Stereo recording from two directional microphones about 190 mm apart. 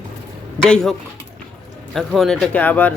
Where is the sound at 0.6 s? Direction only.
5° left (ahead or behind).